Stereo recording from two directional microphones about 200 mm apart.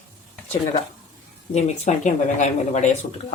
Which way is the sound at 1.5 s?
35° left (ahead or behind).